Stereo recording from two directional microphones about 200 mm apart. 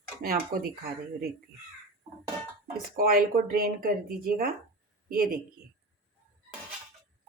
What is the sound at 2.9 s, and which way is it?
Speech, 45° right (ahead or behind).